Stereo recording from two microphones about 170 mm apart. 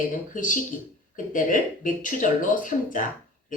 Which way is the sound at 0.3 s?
50° left (ahead or behind).